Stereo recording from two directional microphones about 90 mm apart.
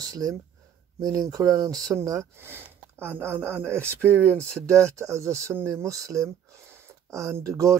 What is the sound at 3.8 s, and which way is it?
Speech, 15° left (ahead or behind).